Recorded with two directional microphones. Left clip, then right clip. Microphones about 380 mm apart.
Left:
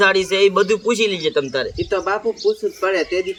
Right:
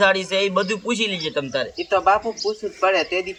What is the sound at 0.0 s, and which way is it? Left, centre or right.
Speech, centre.